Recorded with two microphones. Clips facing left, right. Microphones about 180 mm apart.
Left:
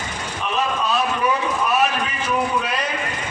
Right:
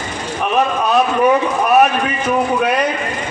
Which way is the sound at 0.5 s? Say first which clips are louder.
Right 7 dB; 65° right (ahead or behind).